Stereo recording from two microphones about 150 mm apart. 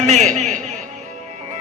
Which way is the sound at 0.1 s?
50° right (ahead or behind).